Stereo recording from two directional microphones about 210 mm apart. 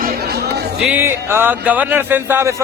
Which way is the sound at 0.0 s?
50° right (ahead or behind).